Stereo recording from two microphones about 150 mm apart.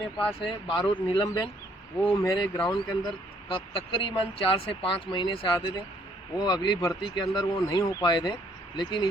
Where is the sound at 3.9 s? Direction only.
35° left (ahead or behind).